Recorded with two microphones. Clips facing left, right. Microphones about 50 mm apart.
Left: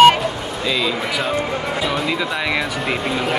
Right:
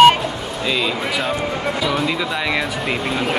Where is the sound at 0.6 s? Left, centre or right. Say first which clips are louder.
Even; centre.